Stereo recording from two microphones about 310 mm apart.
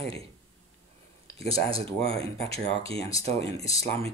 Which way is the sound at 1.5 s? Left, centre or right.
Centre.